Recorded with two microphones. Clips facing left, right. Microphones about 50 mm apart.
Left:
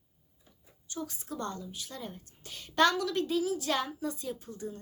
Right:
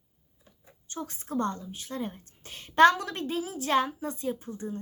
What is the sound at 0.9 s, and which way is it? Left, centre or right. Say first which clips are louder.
A woman's voice: right 5 dB; right.